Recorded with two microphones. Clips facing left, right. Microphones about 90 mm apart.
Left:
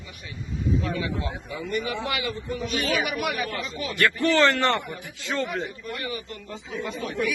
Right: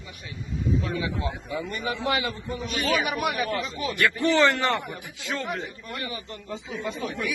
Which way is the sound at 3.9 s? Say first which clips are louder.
Left 1 dB; 15° right (ahead or behind).